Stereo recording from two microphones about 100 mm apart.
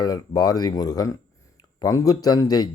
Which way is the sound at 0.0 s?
40° left (ahead or behind).